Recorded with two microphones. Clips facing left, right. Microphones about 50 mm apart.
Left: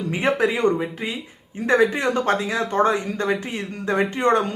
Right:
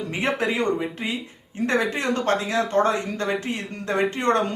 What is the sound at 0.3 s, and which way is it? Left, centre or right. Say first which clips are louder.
Speech: left 5 dB; centre.